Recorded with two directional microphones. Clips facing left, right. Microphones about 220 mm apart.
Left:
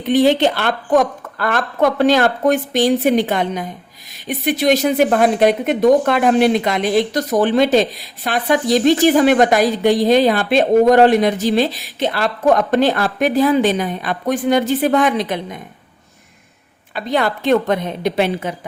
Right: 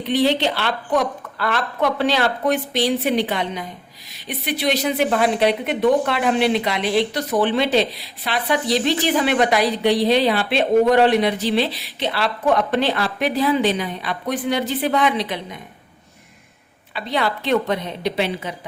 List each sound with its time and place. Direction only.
0.0 s speech: 50° left (ahead or behind)
16.9 s speech: 45° left (ahead or behind)